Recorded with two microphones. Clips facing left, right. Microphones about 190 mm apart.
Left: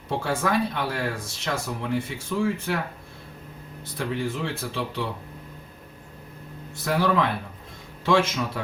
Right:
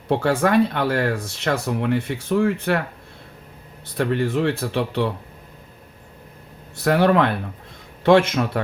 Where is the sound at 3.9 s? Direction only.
65° right (ahead or behind).